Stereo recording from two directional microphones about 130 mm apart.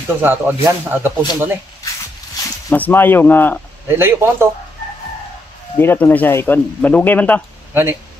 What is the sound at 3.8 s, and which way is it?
Speech, 15° right (ahead or behind).